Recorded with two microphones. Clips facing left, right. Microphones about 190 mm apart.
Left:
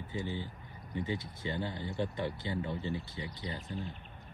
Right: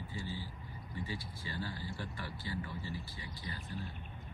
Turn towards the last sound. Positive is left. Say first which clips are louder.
# left 4 dB
turn(degrees=20)  # may be behind; listen again after turning